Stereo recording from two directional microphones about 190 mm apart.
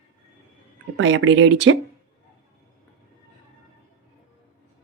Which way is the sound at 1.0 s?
75° right (ahead or behind).